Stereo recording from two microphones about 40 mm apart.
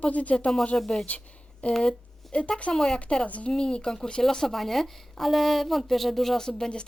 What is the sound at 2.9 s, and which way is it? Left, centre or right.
A woman's voice, left.